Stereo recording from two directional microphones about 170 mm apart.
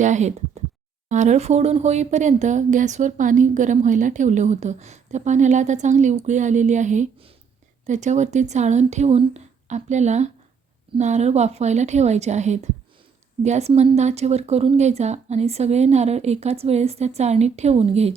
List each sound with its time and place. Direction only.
0.0 s speech: 45° right (ahead or behind)